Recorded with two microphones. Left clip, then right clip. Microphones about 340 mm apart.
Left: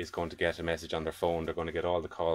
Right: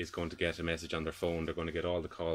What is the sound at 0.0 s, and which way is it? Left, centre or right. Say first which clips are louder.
Speech: left 4 dB; centre.